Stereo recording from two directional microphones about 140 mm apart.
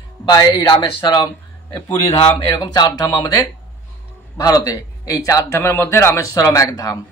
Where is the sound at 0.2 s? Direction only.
30° left (ahead or behind).